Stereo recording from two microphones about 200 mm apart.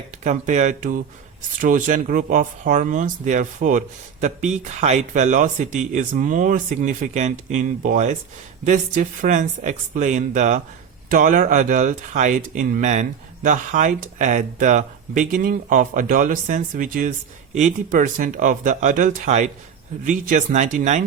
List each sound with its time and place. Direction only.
0.3 s speech: 35° right (ahead or behind)